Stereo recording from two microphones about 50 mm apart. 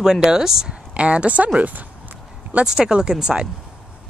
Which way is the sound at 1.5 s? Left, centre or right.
Right.